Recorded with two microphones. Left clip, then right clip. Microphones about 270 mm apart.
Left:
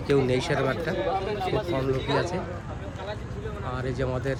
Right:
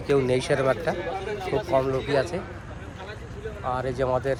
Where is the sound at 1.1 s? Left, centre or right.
Left.